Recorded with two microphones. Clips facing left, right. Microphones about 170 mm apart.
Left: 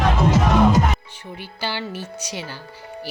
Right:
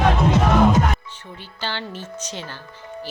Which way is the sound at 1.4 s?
10° left (ahead or behind).